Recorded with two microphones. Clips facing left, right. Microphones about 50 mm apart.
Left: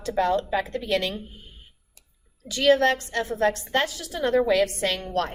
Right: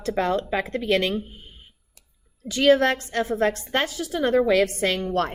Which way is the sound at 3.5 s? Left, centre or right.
Right.